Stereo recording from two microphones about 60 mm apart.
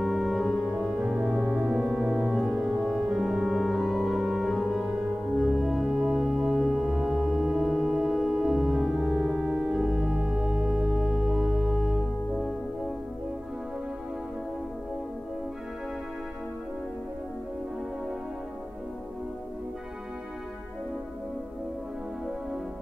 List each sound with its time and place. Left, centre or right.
0.0 s music: centre
0.7 s music: centre
1.4 s music: centre
2.6 s music: right
3.1 s organ: centre
4.8 s music: centre
5.4 s music: centre
7.1 s music: centre
8.8 s organ: centre